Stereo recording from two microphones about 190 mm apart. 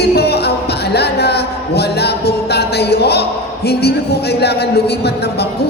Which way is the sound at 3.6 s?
60° left (ahead or behind).